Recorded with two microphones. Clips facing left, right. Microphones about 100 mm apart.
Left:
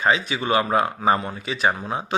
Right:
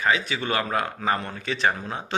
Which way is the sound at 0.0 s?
20° left (ahead or behind).